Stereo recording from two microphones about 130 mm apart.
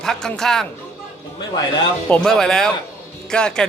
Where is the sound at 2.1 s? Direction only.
5° left (ahead or behind).